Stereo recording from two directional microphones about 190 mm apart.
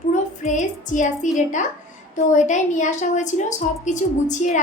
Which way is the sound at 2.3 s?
40° left (ahead or behind).